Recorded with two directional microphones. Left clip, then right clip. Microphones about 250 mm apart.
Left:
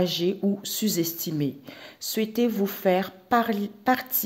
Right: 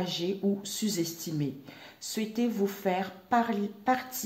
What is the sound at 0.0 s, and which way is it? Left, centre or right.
Speech, left.